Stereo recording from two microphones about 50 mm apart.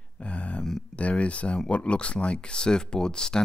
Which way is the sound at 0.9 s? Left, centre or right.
Left.